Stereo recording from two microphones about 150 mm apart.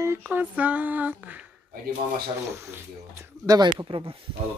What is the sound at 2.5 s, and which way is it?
Speech, 15° right (ahead or behind).